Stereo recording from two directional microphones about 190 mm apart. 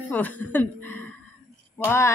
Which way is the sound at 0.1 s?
10° left (ahead or behind).